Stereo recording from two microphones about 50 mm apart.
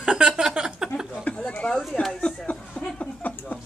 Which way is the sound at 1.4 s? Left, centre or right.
Left.